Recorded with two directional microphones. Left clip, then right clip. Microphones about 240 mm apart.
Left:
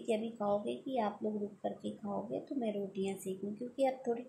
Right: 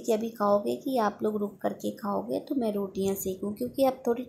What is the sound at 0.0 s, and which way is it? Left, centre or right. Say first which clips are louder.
Speech: right 9 dB; right.